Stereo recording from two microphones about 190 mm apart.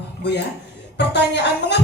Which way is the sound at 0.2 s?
65° left (ahead or behind).